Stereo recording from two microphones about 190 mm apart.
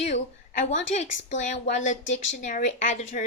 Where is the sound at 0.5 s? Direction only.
40° left (ahead or behind).